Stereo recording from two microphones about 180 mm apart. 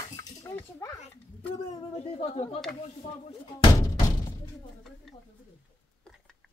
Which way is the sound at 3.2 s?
25° left (ahead or behind).